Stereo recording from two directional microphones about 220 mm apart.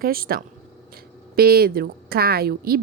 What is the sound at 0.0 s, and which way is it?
A woman's voice, 40° right (ahead or behind).